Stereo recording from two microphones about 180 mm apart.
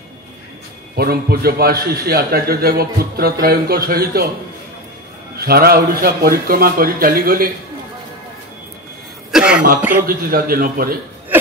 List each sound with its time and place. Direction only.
0.9 s a man's voice: 60° right (ahead or behind)
5.4 s a man's voice: 60° right (ahead or behind)
9.3 s cough: 5° right (ahead or behind)
9.8 s a man's voice: 10° right (ahead or behind)
10.0 s a man's voice: 55° right (ahead or behind)